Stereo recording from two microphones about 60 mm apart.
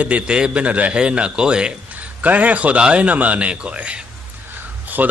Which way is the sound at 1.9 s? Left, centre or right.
Right.